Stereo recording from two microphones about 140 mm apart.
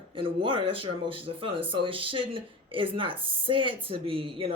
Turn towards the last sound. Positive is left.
turn(degrees=-40)  # may be behind; listen again after turning